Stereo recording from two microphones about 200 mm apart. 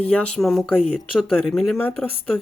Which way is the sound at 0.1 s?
5° left (ahead or behind).